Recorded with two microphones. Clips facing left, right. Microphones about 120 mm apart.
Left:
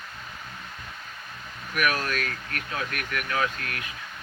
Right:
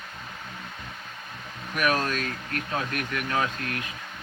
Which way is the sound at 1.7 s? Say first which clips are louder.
Right 1 dB; 30° right (ahead or behind).